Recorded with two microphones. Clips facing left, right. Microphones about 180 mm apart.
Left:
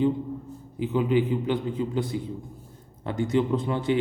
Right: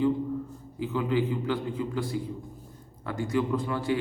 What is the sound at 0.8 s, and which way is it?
A man's voice, 20° left (ahead or behind).